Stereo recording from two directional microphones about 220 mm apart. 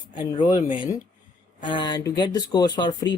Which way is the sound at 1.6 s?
20° left (ahead or behind).